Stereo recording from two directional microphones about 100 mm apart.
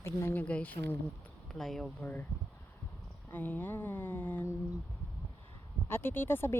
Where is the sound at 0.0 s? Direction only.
25° left (ahead or behind).